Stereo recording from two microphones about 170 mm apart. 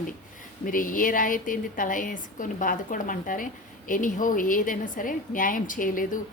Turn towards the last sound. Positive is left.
turn(degrees=50)  # may be behind; listen again after turning